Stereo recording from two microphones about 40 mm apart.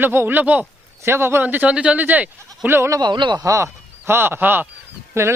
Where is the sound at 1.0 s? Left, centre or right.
Right.